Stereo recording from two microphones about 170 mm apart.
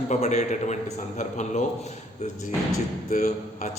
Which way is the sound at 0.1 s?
45° left (ahead or behind).